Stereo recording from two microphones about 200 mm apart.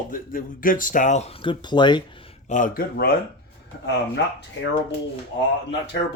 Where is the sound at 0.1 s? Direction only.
45° left (ahead or behind); by 2.0 s 20° left (ahead or behind).